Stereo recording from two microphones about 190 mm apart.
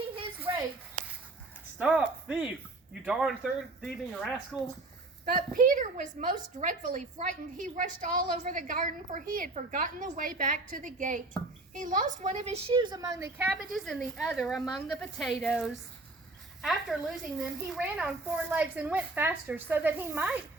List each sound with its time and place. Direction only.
1.8 s a woman's voice: 5° right (ahead or behind)
5.2 s a woman's voice: 45° right (ahead or behind); by 13.5 s 15° right (ahead or behind)
13.5 s a woman's voice: centre (ahead or behind)